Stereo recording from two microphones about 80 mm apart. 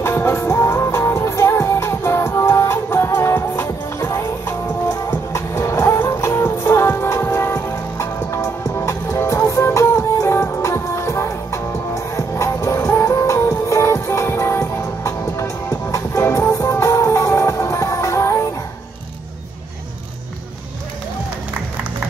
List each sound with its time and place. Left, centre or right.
0.0 s music: left